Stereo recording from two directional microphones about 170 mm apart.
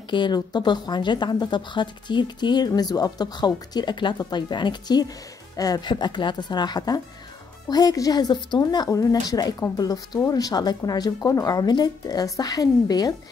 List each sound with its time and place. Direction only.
0.1 s a woman's voice: 25° left (ahead or behind)